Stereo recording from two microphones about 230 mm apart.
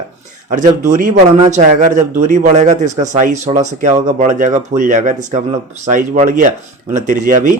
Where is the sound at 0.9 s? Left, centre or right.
Right.